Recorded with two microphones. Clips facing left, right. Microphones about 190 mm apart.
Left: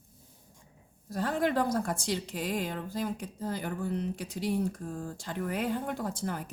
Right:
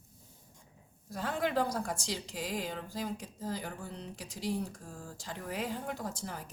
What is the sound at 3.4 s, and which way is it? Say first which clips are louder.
Speech: left 6 dB; 55° left (ahead or behind).